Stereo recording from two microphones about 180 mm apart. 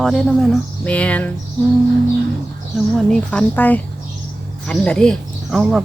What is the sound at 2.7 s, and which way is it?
Speech, 5° left (ahead or behind).